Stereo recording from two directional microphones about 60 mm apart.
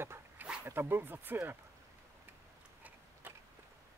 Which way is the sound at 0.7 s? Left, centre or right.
Right.